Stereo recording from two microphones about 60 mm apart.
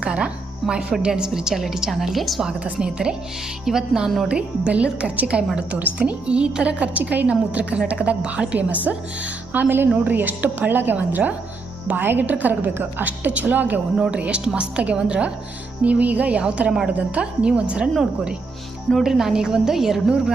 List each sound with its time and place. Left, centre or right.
0.0 s a woman's voice: centre
2.6 s a woman's voice: centre
13.9 s a woman's voice: centre
19.0 s a woman's voice: centre